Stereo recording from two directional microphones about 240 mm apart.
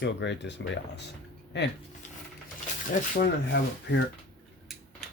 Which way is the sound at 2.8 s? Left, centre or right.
Left.